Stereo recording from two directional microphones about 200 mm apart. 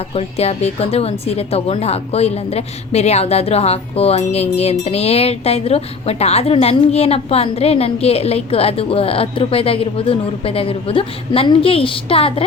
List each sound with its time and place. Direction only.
0.2 s speech: 30° left (ahead or behind)